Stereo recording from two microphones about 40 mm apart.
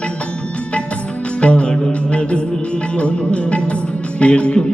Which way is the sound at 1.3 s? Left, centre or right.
Left.